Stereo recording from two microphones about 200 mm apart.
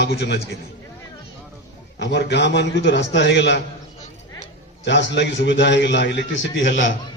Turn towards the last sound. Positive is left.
turn(degrees=65)  # may be behind; listen again after turning